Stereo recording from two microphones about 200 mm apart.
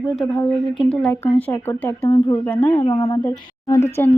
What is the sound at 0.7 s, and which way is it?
Speech, 25° left (ahead or behind).